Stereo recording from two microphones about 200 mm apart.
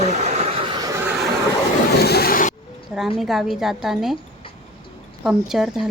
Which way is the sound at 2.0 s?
50° left (ahead or behind).